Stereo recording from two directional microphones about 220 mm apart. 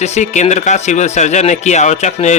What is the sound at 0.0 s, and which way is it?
Speech, 30° left (ahead or behind).